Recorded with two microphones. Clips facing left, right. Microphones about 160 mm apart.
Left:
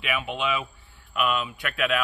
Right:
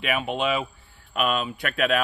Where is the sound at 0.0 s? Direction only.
40° right (ahead or behind).